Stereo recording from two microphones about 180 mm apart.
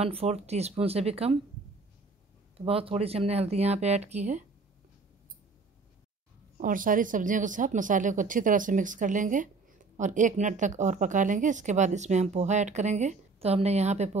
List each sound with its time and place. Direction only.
0.0 s speech: 35° right (ahead or behind)
2.5 s speech: 30° right (ahead or behind)
6.6 s speech: 50° right (ahead or behind)